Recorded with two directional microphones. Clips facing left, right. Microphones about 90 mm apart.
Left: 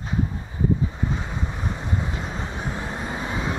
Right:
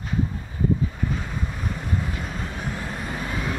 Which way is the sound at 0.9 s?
20° left (ahead or behind).